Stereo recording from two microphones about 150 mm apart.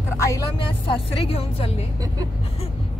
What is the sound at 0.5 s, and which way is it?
Speech, 35° left (ahead or behind).